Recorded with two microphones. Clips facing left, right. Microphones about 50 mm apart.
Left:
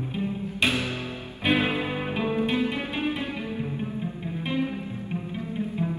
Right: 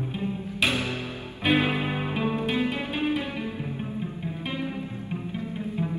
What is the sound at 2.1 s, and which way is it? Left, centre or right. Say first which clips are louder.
Music: left 3 dB; left.